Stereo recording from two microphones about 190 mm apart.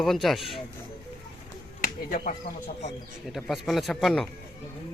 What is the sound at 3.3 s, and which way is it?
Speech, centre (ahead or behind).